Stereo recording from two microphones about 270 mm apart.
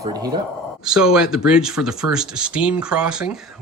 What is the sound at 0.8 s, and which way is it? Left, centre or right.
Speech, centre.